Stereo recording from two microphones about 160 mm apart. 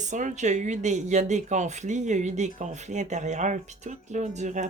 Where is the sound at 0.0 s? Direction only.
50° right (ahead or behind).